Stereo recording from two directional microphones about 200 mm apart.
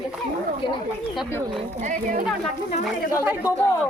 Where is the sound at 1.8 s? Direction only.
40° right (ahead or behind).